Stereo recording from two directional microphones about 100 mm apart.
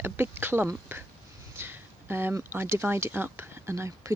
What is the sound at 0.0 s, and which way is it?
Speech, 20° right (ahead or behind).